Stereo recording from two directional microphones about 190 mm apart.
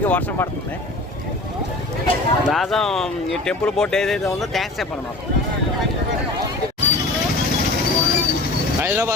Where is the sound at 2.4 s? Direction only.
Centre (ahead or behind).